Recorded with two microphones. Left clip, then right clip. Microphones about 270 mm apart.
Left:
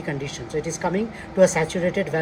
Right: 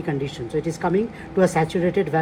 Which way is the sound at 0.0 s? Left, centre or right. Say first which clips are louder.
Right 3 dB; centre.